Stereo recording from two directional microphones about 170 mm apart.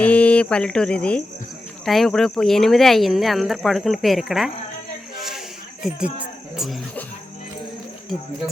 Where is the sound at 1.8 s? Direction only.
Centre (ahead or behind).